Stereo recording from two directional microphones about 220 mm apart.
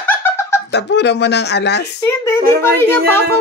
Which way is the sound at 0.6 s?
50° left (ahead or behind).